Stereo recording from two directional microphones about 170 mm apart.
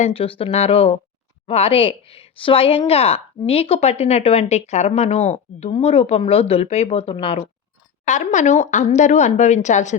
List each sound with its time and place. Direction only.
0.0 s a woman's voice: 35° left (ahead or behind)
8.0 s speech: 45° left (ahead or behind)